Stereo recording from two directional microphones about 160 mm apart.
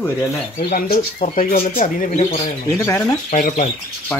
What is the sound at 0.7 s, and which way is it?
Speech, 50° left (ahead or behind).